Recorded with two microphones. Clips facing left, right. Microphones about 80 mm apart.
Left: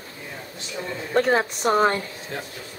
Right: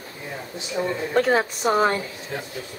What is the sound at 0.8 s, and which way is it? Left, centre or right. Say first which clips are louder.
Speech: right 7 dB; centre.